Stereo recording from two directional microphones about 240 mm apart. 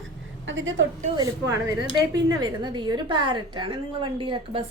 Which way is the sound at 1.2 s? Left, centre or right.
Centre.